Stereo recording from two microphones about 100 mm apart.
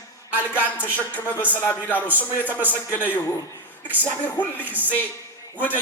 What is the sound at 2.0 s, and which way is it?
Speech, 15° right (ahead or behind).